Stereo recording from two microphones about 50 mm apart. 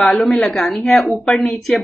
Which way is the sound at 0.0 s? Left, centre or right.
Centre.